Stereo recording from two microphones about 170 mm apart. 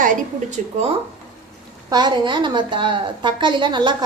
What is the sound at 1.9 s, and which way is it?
A woman's voice, 25° right (ahead or behind).